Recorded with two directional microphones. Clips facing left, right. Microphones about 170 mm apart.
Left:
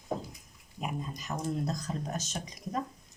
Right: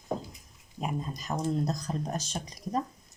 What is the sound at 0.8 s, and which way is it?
Speech, 35° right (ahead or behind).